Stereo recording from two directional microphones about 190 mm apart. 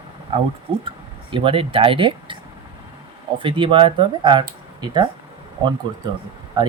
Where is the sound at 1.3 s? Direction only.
25° right (ahead or behind).